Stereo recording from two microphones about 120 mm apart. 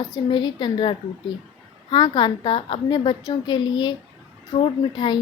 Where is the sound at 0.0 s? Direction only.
35° left (ahead or behind).